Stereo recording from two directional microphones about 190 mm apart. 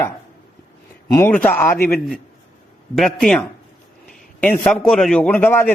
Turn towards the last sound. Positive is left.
turn(degrees=10)  # may be behind; listen again after turning